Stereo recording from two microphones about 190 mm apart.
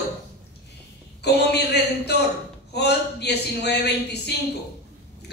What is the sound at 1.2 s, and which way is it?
Speech, 60° left (ahead or behind).